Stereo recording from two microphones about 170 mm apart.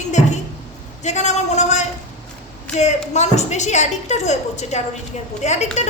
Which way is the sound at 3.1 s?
40° left (ahead or behind).